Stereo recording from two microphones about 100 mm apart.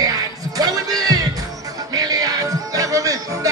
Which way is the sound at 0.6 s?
40° right (ahead or behind).